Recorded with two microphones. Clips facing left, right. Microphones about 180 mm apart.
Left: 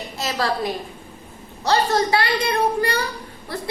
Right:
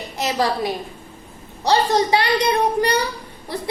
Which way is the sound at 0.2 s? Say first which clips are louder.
Right 3 dB; 15° right (ahead or behind).